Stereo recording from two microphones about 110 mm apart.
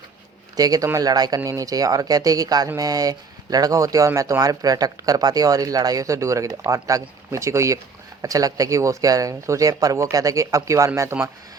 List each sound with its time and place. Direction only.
0.5 s speech: 35° right (ahead or behind)